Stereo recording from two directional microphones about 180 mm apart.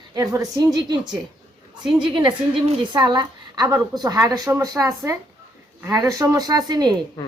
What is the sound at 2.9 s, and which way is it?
Speech, 25° right (ahead or behind).